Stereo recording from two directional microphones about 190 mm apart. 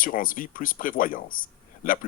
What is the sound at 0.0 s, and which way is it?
Speech, 45° left (ahead or behind).